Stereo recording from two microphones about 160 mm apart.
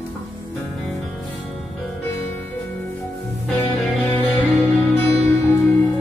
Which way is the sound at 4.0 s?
5° left (ahead or behind).